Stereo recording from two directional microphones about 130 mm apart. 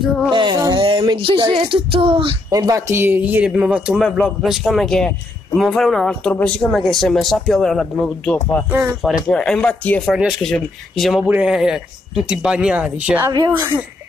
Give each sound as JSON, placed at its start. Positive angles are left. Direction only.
{"t": 0.3, "sound": "a sound", "side_deg": -35}
{"t": 2.5, "sound": "speech", "side_deg": -25}
{"t": 8.6, "sound": "speech", "side_deg": -20}
{"t": 9.3, "sound": "speech", "side_deg": 5}
{"t": 10.1, "sound": "speech", "side_deg": -5}
{"t": 13.6, "sound": "speech", "side_deg": -20}